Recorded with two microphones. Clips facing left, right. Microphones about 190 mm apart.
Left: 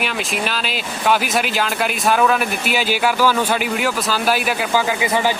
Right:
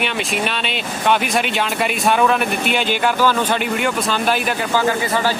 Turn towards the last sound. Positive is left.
turn(degrees=15)  # may be behind; listen again after turning